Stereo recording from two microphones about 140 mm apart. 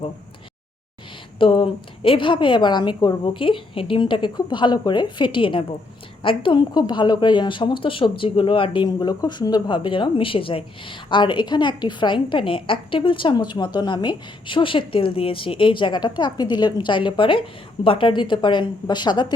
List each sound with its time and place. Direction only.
1.4 s a woman's voice: 40° left (ahead or behind)